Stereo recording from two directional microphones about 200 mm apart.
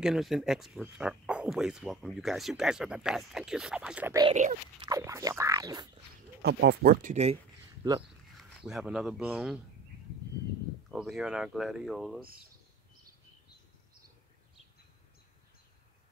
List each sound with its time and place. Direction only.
0.0 s speech: centre (ahead or behind)
4.3 s dog: 35° right (ahead or behind)
4.7 s speech: 20° right (ahead or behind)
6.4 s speech: 55° right (ahead or behind); by 7.3 s 35° right (ahead or behind)
8.4 s speech: centre (ahead or behind)
10.9 s speech: centre (ahead or behind)